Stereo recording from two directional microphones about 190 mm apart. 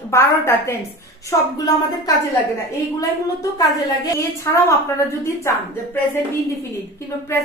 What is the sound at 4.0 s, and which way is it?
A woman's voice, 15° left (ahead or behind).